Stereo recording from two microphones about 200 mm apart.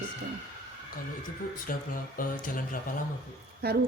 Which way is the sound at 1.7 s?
45° left (ahead or behind).